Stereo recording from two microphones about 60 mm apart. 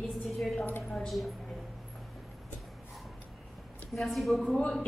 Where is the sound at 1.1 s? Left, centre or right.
Centre.